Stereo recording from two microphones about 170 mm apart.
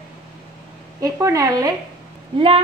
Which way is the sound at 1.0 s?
20° right (ahead or behind).